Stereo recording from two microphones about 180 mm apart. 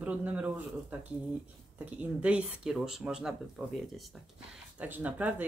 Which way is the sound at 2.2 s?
5° right (ahead or behind).